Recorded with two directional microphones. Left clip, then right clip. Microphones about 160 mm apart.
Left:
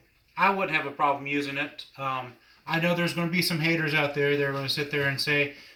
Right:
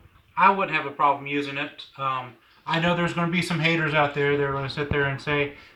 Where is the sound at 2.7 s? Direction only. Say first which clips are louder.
Right 3 dB; 10° left (ahead or behind).